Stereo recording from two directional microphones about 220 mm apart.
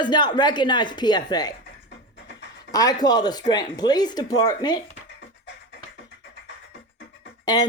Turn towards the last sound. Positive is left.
turn(degrees=20)  # may be behind; listen again after turning